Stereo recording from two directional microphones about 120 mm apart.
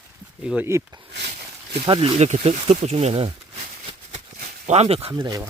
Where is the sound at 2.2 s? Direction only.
60° right (ahead or behind).